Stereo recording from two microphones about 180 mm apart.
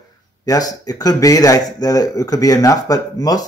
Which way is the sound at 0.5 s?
20° left (ahead or behind).